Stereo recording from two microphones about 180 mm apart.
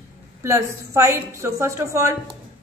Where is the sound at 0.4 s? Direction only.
15° right (ahead or behind).